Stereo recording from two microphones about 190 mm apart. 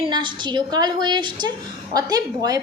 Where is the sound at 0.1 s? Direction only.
20° right (ahead or behind).